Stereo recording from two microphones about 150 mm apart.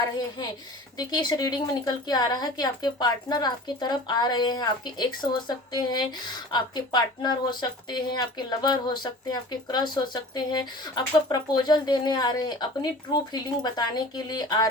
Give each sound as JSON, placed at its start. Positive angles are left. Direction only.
{"t": 0.9, "sound": "a woman's voice", "side_deg": 30}